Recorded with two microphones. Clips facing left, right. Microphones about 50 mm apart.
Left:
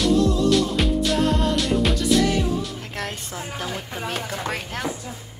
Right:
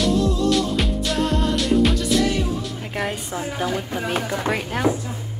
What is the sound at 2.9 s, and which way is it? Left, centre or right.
Speech, centre.